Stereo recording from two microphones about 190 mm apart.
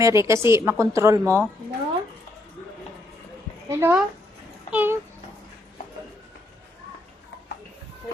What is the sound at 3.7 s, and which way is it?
A woman's voice, 10° right (ahead or behind).